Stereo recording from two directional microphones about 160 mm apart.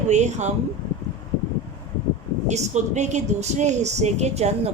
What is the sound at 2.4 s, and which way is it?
A woman's voice, 45° right (ahead or behind).